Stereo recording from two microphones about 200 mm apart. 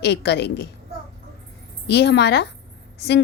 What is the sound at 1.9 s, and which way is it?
Speech, 55° left (ahead or behind).